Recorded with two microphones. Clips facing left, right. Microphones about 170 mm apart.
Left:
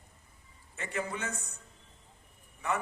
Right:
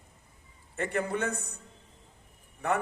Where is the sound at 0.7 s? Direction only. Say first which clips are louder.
Right 6 dB; 55° right (ahead or behind).